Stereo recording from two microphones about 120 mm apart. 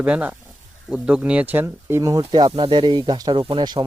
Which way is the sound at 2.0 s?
30° right (ahead or behind).